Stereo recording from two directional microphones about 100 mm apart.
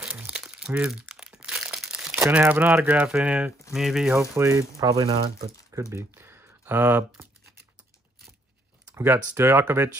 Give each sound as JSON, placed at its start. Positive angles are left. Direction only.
{"t": 0.3, "sound": "crumpling", "side_deg": -10}
{"t": 2.3, "sound": "speech", "side_deg": -15}
{"t": 4.4, "sound": "speech", "side_deg": -30}
{"t": 5.0, "sound": "speech", "side_deg": -90}
{"t": 5.7, "sound": "a sound", "side_deg": -30}
{"t": 8.9, "sound": "speech", "side_deg": -20}